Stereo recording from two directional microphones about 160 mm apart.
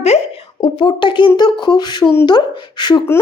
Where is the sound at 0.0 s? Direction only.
40° left (ahead or behind).